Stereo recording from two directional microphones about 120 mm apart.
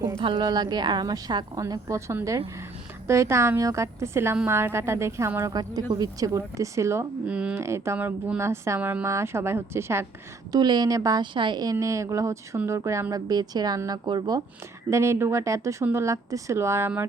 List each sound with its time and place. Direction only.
0.2 s a woman's voice: 40° right (ahead or behind); by 7.1 s 25° right (ahead or behind)
7.3 s speech: 10° right (ahead or behind)
7.5 s a woman's voice: 20° right (ahead or behind)
10.5 s speech: 35° right (ahead or behind)
14.8 s a woman's voice: 25° right (ahead or behind)